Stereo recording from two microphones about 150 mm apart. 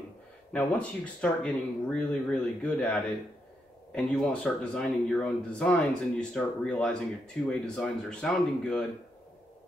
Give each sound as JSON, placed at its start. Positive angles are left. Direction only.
{"t": 0.5, "sound": "speech", "side_deg": 10}